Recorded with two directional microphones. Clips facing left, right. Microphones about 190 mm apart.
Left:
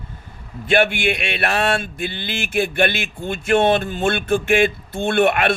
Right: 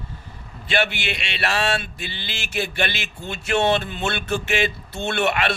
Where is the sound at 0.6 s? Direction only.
50° left (ahead or behind).